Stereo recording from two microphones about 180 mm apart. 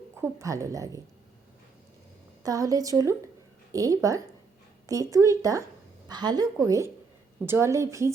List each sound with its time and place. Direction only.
0.2 s a woman's voice: 15° right (ahead or behind)
2.4 s a woman's voice: 20° right (ahead or behind)